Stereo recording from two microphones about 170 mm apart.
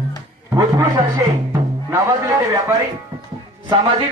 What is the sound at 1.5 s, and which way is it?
Music, 15° right (ahead or behind).